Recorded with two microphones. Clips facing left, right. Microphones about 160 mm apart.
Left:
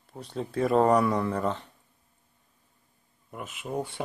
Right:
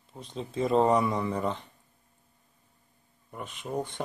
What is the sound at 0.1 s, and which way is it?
Speech, 20° left (ahead or behind).